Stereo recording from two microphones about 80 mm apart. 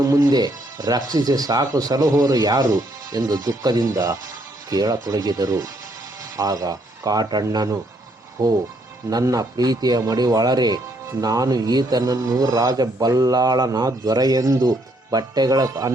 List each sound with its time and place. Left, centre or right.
0.1 s speech: right
8.4 s speech: right